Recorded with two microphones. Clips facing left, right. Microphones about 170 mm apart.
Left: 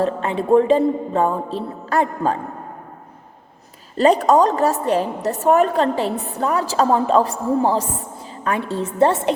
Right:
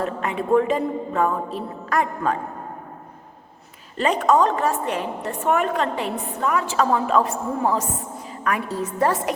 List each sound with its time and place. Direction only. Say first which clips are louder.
0.0 s a woman's voice: left 5 dB; 30° left (ahead or behind)
3.9 s a woman's voice: left 5 dB; 35° left (ahead or behind)